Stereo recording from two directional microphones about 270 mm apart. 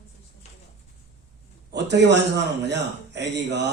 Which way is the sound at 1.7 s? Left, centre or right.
Right.